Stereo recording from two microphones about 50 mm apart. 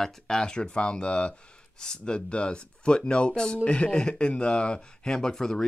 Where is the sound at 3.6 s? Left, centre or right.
Left.